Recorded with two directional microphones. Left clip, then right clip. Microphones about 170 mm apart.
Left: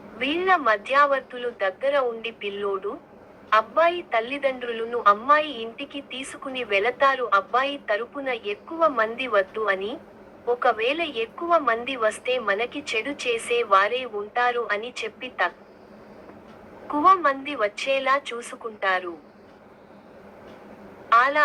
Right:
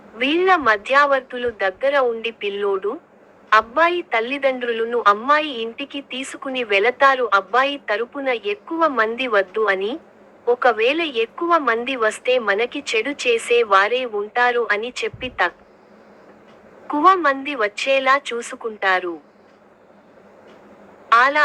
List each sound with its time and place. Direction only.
0.2 s a woman's voice: 40° right (ahead or behind)
16.9 s a woman's voice: 40° right (ahead or behind)
21.1 s a woman's voice: 40° right (ahead or behind)